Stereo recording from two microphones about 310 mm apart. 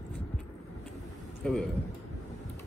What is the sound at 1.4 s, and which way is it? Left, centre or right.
Speech, centre.